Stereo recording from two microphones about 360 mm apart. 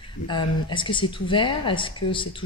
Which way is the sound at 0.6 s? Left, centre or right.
Centre.